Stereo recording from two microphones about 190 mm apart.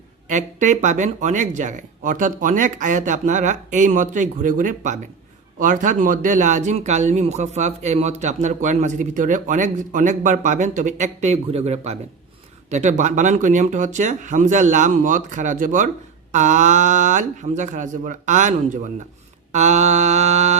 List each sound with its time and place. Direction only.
0.3 s speech: 40° right (ahead or behind)